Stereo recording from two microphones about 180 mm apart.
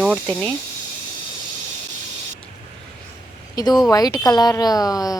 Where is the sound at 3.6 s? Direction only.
20° left (ahead or behind).